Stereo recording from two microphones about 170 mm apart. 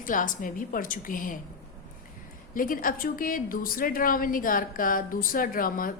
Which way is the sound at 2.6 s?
55° left (ahead or behind).